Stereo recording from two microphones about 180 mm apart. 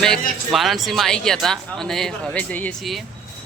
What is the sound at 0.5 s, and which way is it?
Speech, centre (ahead or behind).